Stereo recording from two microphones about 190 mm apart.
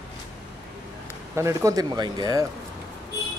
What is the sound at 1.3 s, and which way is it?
Speech, 15° right (ahead or behind).